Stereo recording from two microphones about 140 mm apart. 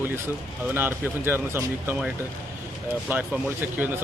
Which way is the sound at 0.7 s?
15° right (ahead or behind).